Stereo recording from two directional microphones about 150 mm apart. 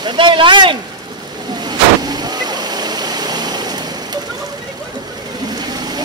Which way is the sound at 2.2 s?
25° right (ahead or behind).